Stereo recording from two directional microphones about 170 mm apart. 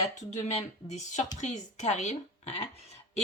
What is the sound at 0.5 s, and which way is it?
Speech, 40° left (ahead or behind).